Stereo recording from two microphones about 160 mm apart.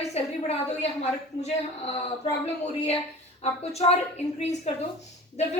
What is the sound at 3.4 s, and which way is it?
Speech, 40° left (ahead or behind).